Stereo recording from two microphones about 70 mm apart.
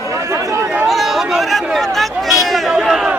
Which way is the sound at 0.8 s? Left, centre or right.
Centre.